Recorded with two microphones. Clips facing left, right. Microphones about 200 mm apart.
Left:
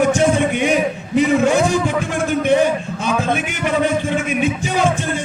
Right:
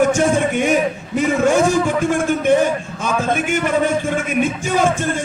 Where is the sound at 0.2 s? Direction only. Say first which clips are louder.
Even; 45° right (ahead or behind).